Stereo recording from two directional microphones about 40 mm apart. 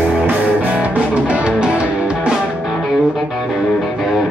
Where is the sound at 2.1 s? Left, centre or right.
Centre.